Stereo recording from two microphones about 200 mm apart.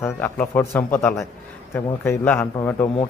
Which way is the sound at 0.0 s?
10° left (ahead or behind).